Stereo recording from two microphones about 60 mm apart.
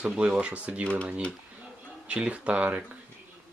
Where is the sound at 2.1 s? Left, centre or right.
Centre.